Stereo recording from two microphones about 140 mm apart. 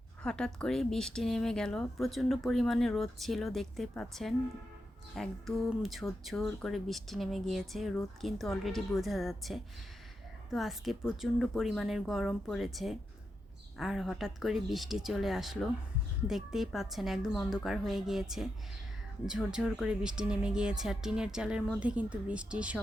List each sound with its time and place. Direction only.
0.2 s speech: 5° left (ahead or behind)